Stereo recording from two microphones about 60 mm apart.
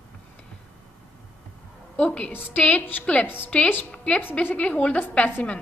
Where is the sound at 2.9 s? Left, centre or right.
Left.